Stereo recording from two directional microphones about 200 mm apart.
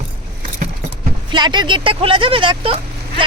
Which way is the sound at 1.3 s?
20° right (ahead or behind).